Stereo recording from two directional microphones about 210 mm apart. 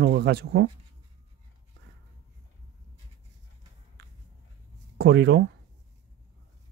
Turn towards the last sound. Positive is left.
turn(degrees=-55)  # may be behind; listen again after turning